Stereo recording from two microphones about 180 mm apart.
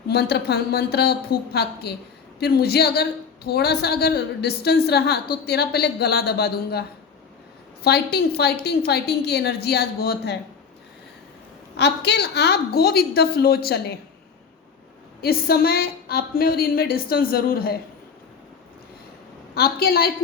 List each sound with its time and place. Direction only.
0.1 s a woman's voice: 65° left (ahead or behind)
7.9 s a woman's voice: 65° left (ahead or behind)
11.8 s a woman's voice: 70° left (ahead or behind)
15.2 s a woman's voice: 60° left (ahead or behind)
19.5 s a woman's voice: 60° left (ahead or behind)